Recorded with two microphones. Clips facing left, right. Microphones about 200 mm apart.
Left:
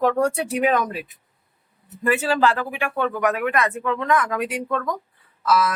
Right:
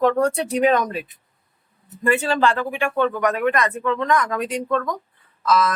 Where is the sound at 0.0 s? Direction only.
10° left (ahead or behind).